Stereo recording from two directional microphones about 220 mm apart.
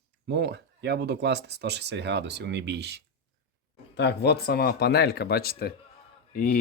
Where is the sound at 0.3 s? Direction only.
50° right (ahead or behind).